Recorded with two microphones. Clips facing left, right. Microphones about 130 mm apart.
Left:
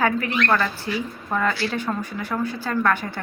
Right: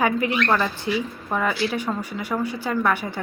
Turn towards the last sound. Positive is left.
turn(degrees=-15)  # may be behind; listen again after turning